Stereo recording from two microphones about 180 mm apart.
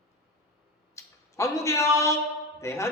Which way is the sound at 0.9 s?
15° left (ahead or behind).